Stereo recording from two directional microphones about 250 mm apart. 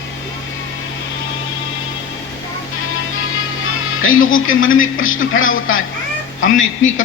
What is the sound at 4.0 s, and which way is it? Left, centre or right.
A man's voice, left.